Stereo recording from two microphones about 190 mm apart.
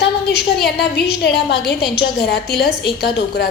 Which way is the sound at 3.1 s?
55° left (ahead or behind).